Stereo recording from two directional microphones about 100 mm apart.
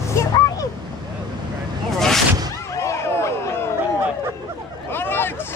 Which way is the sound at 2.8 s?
30° left (ahead or behind).